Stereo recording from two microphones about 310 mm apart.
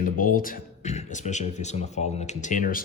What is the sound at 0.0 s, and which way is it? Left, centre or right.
Speech, left.